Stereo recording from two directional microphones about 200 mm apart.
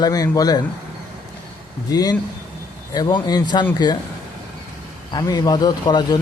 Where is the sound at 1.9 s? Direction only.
20° left (ahead or behind).